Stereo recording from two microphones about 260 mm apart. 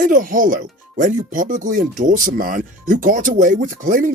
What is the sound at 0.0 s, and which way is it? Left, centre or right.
Speech, right.